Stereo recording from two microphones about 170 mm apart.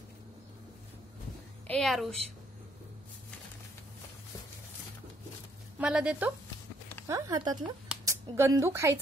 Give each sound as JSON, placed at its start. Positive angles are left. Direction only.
{"t": 1.7, "sound": "a woman's voice", "side_deg": 0}
{"t": 5.8, "sound": "speech", "side_deg": -5}
{"t": 7.1, "sound": "speech", "side_deg": -20}